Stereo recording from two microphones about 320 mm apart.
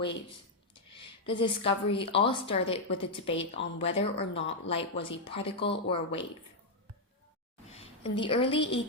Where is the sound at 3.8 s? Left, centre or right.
Centre.